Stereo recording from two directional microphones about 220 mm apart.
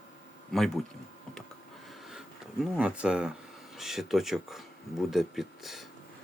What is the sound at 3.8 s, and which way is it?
Speech, centre (ahead or behind).